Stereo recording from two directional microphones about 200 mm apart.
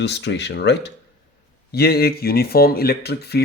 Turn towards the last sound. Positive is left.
turn(degrees=55)  # may be behind; listen again after turning